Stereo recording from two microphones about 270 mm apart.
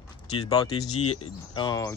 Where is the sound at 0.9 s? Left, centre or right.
Left.